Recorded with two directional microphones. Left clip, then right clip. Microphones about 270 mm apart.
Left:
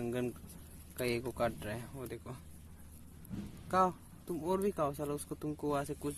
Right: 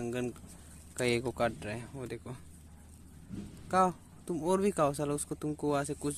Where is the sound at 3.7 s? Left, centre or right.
Centre.